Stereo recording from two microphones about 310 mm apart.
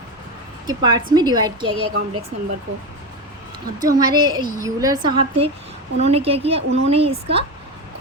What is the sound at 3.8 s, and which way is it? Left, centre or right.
A woman's voice, centre.